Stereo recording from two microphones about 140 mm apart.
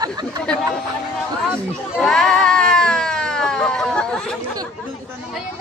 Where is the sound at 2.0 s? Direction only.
5° left (ahead or behind).